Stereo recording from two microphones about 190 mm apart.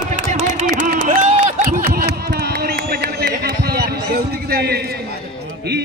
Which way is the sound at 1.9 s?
55° right (ahead or behind).